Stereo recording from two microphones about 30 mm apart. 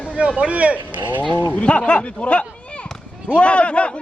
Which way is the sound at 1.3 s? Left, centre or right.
Left.